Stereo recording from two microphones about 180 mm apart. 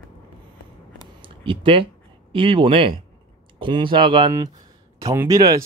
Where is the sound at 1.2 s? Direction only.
30° right (ahead or behind).